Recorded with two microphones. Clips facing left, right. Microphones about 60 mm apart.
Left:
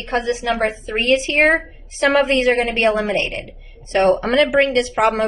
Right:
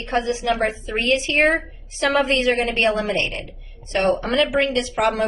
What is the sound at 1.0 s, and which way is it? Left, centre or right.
Speech, left.